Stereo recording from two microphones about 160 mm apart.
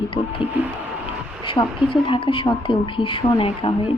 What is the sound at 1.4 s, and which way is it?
Speech, 30° left (ahead or behind).